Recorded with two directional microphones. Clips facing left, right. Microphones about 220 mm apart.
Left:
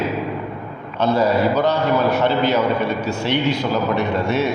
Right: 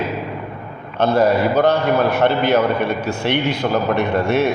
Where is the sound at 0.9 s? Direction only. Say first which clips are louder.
Right 2 dB; 55° right (ahead or behind).